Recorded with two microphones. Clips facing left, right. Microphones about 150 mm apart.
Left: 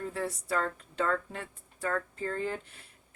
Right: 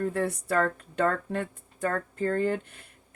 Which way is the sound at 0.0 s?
60° right (ahead or behind).